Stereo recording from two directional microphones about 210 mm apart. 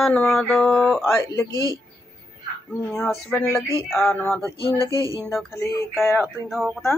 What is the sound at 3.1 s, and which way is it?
Speech, 5° left (ahead or behind).